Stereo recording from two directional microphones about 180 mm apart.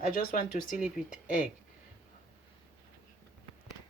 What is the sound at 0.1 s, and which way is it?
Speech, 50° left (ahead or behind).